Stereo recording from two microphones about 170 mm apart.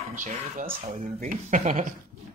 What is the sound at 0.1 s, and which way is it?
Speech, 50° right (ahead or behind).